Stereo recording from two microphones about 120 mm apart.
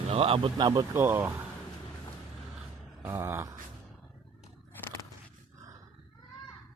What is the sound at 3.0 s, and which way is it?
Speech, 20° right (ahead or behind).